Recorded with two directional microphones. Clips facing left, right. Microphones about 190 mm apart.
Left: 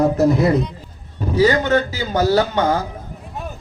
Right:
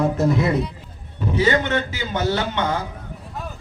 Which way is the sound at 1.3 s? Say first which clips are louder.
Left 4 dB; 25° right (ahead or behind).